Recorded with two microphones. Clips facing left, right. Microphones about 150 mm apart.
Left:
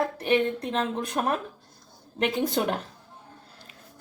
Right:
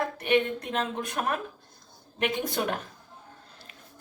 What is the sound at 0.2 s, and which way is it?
Speech, 35° left (ahead or behind).